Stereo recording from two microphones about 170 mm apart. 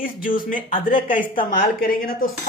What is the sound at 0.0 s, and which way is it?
Speech, 55° left (ahead or behind).